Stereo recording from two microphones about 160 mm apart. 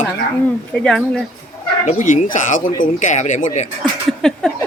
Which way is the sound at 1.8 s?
50° left (ahead or behind).